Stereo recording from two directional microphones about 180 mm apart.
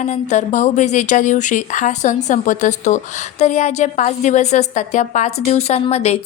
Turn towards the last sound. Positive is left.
turn(degrees=35)  # may be behind; listen again after turning